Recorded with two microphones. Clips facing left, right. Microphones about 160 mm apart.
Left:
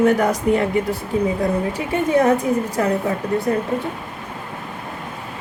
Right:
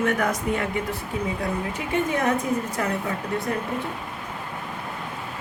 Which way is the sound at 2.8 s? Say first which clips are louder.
Left 10 dB; 35° left (ahead or behind).